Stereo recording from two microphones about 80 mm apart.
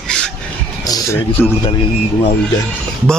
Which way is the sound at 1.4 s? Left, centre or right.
Left.